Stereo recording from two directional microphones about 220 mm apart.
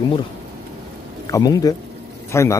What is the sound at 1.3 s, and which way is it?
A man's voice, 15° left (ahead or behind).